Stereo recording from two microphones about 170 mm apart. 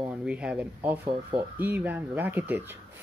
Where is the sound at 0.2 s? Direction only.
5° right (ahead or behind).